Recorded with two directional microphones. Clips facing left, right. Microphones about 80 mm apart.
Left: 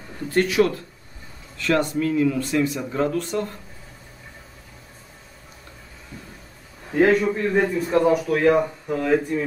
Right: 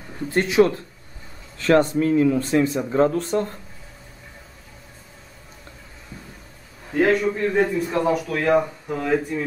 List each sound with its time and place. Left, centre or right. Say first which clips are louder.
0.3 s speech: right 2 dB; right
6.9 s a man's voice: left 1 dB; centre